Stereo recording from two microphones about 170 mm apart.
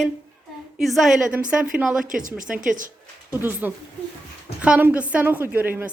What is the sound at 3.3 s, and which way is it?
Speech, 10° right (ahead or behind).